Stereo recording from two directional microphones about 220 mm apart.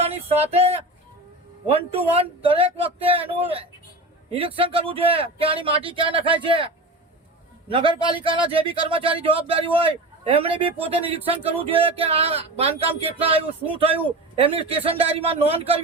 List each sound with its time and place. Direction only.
0.0 s speech: 30° right (ahead or behind)
7.7 s speech: 25° right (ahead or behind)